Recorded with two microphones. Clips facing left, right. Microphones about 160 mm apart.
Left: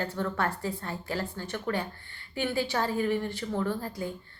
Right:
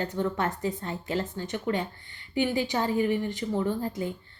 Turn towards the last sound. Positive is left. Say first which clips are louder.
# right 3 dB
turn(degrees=-20)  # may be behind; listen again after turning